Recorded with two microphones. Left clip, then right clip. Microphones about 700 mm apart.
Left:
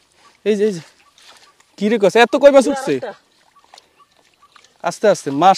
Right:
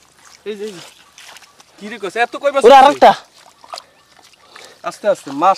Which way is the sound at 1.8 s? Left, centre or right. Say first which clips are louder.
Left 7 dB; left.